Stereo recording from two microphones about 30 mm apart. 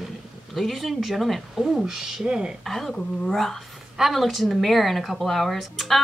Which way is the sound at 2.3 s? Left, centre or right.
Right.